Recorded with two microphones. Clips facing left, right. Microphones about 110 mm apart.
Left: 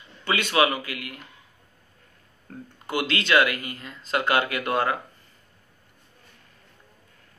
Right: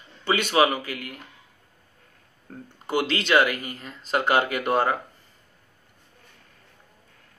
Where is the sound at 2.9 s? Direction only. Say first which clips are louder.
Right 1 dB; 30° right (ahead or behind).